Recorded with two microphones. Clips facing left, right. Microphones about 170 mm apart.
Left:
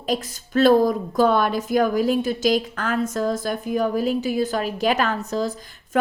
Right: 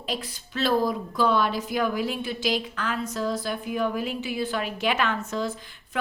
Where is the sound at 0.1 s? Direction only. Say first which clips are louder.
Left 9 dB; 50° left (ahead or behind).